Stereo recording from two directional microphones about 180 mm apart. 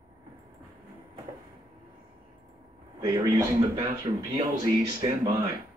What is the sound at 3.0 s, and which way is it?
Speech, 20° right (ahead or behind).